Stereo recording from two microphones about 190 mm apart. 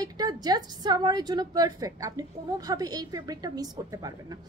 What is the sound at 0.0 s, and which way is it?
A woman's voice, 20° right (ahead or behind).